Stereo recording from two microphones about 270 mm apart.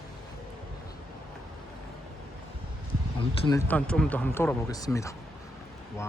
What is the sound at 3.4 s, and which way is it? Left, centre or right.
Speech, centre.